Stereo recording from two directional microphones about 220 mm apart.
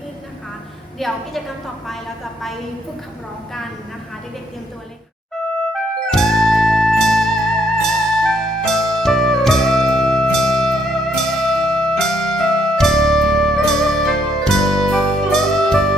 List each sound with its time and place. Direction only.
0.9 s a woman's voice: centre (ahead or behind)
6.0 s music: centre (ahead or behind)